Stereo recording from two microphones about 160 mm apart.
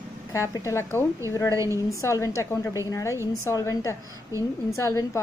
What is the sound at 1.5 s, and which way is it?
Speech, 20° right (ahead or behind).